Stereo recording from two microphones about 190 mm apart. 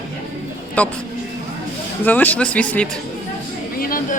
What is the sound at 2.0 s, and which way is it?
Speech, 10° left (ahead or behind).